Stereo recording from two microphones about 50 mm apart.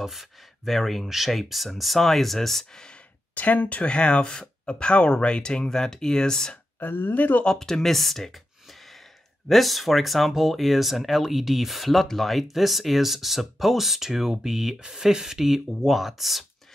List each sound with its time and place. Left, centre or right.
0.0 s speech: centre
3.3 s speech: left; by 6.6 s centre
6.8 s speech: left
7.4 s speech: centre